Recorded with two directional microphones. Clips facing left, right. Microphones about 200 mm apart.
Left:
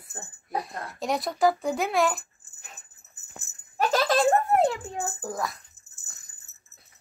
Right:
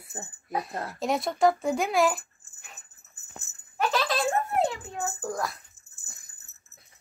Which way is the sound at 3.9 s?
45° left (ahead or behind).